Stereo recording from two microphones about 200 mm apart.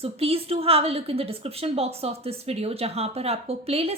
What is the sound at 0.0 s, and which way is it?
A woman's voice, 30° right (ahead or behind).